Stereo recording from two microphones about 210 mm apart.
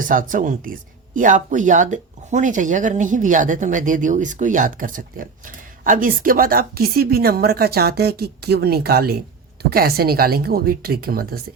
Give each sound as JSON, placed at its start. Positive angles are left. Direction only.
{"t": 0.0, "sound": "a woman's voice", "side_deg": -40}